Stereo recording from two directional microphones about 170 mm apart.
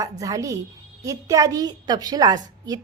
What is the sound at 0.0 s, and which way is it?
A woman's voice, 20° right (ahead or behind).